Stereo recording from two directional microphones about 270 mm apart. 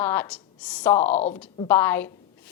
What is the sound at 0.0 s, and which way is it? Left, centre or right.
Speech, centre.